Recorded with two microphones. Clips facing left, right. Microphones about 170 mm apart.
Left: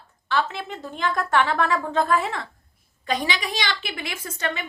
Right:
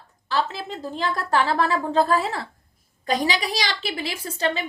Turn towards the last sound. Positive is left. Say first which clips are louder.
# right 4 dB
turn(degrees=-35)  # may be behind; listen again after turning